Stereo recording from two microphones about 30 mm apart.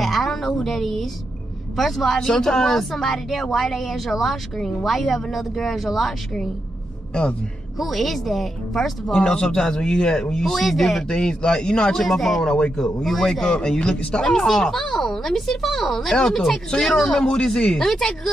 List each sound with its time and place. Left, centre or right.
0.0 s a sound: centre
0.7 s speech: centre
7.8 s speech: centre
9.1 s speech: left
10.5 s speech: centre
11.1 s speech: left
11.9 s speech: centre
12.4 s speech: left
13.0 s speech: centre
13.4 s speech: left
14.6 s speech: centre
15.0 s speech: centre
17.1 s speech: left